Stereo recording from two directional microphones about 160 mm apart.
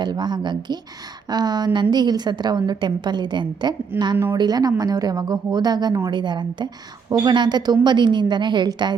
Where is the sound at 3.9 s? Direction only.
15° right (ahead or behind).